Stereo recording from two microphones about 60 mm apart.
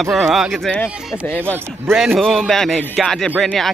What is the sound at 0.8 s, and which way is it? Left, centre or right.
Speech, left.